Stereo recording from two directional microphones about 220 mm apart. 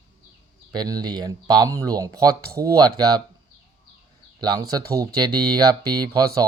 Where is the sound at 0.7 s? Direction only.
20° right (ahead or behind).